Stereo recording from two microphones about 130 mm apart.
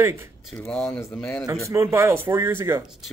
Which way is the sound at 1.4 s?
20° right (ahead or behind).